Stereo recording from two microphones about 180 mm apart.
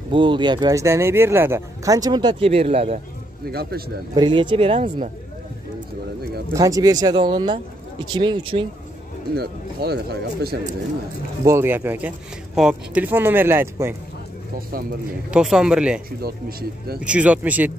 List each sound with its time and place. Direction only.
0.1 s speech: 25° right (ahead or behind)
3.4 s speech: 60° right (ahead or behind)
4.1 s speech: 25° right (ahead or behind)
6.5 s speech: 20° right (ahead or behind)
9.3 s speech: 60° right (ahead or behind)
11.4 s speech: 15° right (ahead or behind)
14.7 s speech: 55° right (ahead or behind)
15.3 s speech: 5° right (ahead or behind)
16.2 s speech: 60° right (ahead or behind)
17.0 s speech: 5° right (ahead or behind)